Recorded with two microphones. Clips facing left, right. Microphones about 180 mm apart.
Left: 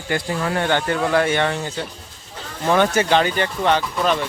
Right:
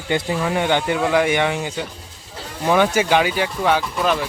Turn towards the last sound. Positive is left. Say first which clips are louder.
# even
turn(degrees=-5)  # may be behind; listen again after turning